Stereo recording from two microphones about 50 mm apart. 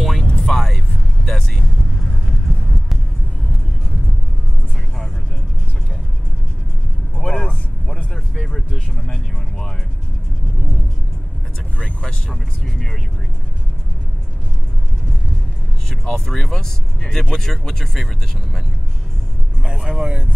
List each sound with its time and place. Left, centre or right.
0.0 s music: centre
0.4 s vehicle: centre
7.2 s vehicle: centre
8.4 s a sound: centre
8.7 s vehicle: centre
11.8 s vehicle: centre
16.3 s vehicle: centre
19.9 s vehicle: right